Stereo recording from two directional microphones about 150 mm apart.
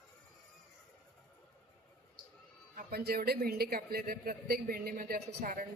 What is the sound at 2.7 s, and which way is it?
Speech, 90° right.